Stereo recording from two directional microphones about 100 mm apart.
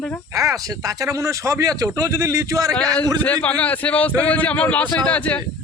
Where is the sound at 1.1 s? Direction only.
30° right (ahead or behind).